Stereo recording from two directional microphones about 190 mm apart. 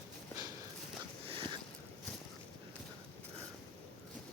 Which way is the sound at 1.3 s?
30° right (ahead or behind).